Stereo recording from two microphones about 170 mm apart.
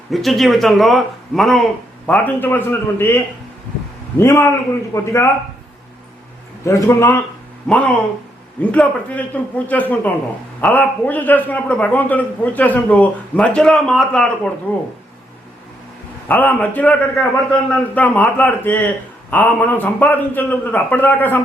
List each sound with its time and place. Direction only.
0.1 s speech: centre (ahead or behind)
4.2 s a man's voice: 15° left (ahead or behind)
6.7 s a man's voice: 15° left (ahead or behind)
16.3 s a man's voice: 10° left (ahead or behind)